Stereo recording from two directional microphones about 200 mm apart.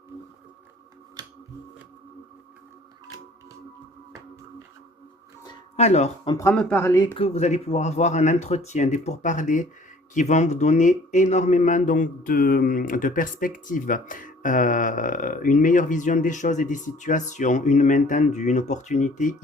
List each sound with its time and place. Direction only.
5.7 s speech: 35° left (ahead or behind)
6.5 s a man's voice: 5° left (ahead or behind); by 19.4 s 40° left (ahead or behind)